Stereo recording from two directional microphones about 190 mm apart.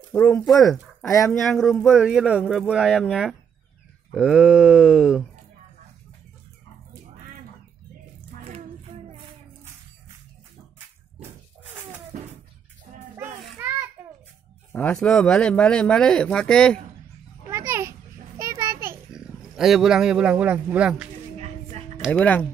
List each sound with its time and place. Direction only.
0.1 s speech: 10° left (ahead or behind)
0.5 s speech: centre (ahead or behind)
1.0 s speech: 15° left (ahead or behind)
1.3 s speech: centre (ahead or behind)
8.5 s music: 35° right (ahead or behind)
11.2 s a sound: 10° right (ahead or behind)
13.1 s children playing: 10° right (ahead or behind)
14.7 s speech: 5° left (ahead or behind)
17.5 s children playing: 10° right (ahead or behind)
18.4 s oink: 15° right (ahead or behind)
19.5 s speech: centre (ahead or behind)
22.0 s speech: 5° left (ahead or behind)